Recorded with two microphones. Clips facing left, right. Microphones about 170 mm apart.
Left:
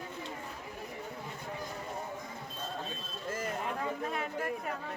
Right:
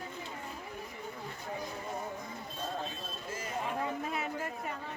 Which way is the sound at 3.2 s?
50° left (ahead or behind).